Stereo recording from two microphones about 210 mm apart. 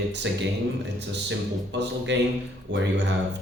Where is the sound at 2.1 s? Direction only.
55° right (ahead or behind).